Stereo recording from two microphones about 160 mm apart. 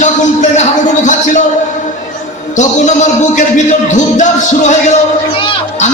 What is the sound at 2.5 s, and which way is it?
Music, 50° left (ahead or behind).